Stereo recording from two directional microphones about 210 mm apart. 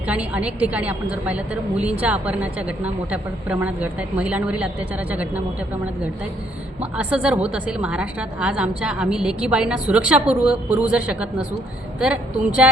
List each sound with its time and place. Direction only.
0.1 s a woman's voice: 5° right (ahead or behind)
6.9 s a woman's voice: 5° right (ahead or behind)